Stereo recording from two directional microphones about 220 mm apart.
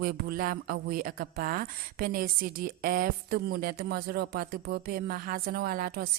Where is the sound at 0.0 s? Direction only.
40° right (ahead or behind).